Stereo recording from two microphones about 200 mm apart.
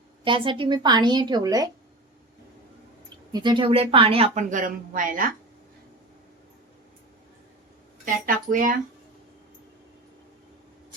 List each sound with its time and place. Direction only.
0.3 s speech: 25° right (ahead or behind)
3.3 s speech: 25° right (ahead or behind); by 5.3 s 45° right (ahead or behind)
8.0 s speech: 40° right (ahead or behind)